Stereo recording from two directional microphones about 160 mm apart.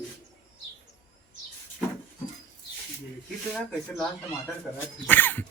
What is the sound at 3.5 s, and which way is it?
Speech, centre (ahead or behind).